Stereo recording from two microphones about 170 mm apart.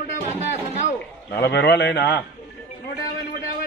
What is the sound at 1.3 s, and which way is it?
Speech, 75° left (ahead or behind).